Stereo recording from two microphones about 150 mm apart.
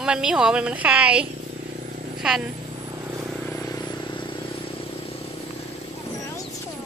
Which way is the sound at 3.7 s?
35° left (ahead or behind).